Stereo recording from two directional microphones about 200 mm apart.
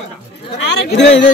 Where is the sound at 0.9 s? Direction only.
60° left (ahead or behind).